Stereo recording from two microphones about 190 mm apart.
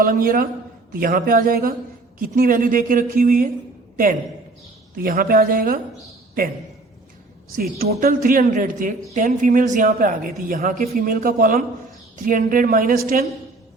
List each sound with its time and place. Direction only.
0.0 s a man's voice: 50° right (ahead or behind)
7.5 s speech: 55° right (ahead or behind)